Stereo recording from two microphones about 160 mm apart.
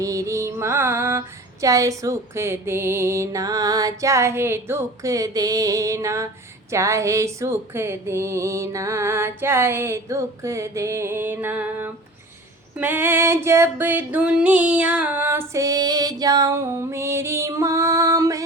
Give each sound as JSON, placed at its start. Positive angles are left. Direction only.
{"t": 0.0, "sound": "music", "side_deg": -20}
{"t": 6.7, "sound": "female singing", "side_deg": -20}